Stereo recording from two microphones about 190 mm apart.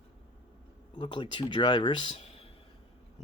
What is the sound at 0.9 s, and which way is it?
A man's voice, 25° left (ahead or behind).